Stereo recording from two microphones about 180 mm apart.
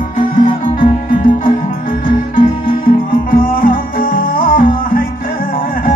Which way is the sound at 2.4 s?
50° left (ahead or behind).